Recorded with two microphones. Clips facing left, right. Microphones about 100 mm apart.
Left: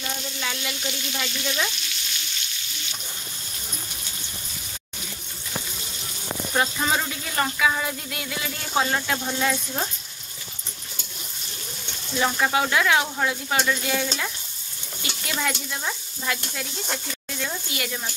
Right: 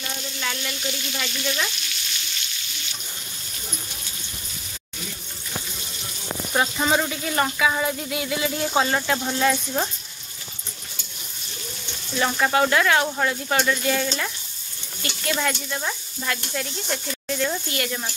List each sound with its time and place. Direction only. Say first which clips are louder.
0.4 s speech: right 3 dB; 5° left (ahead or behind)
6.5 s speech: right 2 dB; 5° right (ahead or behind)
12.2 s speech: right 2 dB; 5° left (ahead or behind)